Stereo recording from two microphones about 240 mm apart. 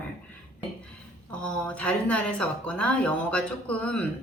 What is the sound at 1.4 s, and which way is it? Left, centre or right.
A woman's voice, centre.